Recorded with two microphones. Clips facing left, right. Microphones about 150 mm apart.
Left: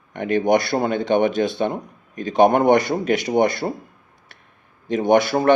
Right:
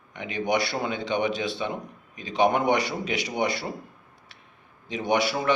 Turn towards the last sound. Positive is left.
turn(degrees=50)  # may be behind; listen again after turning